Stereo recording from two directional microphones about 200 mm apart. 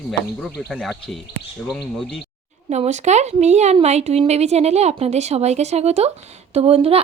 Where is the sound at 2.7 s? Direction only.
35° right (ahead or behind).